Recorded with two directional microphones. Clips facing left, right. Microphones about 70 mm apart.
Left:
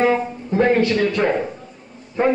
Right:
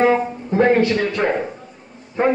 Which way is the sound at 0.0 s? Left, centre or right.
Right.